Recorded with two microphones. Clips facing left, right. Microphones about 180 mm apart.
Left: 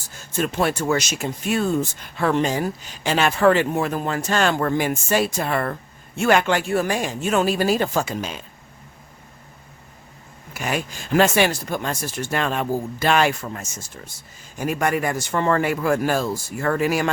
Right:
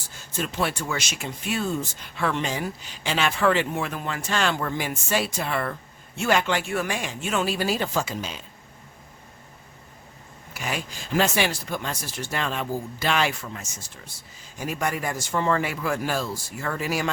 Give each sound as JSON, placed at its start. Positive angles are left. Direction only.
{"t": 0.3, "sound": "speech", "side_deg": 50}
{"t": 6.6, "sound": "speech", "side_deg": 40}
{"t": 10.5, "sound": "speech", "side_deg": 50}
{"t": 14.6, "sound": "speech", "side_deg": 60}